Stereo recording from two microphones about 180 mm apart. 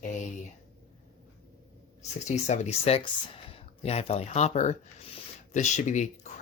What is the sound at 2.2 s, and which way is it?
Speech, 40° left (ahead or behind).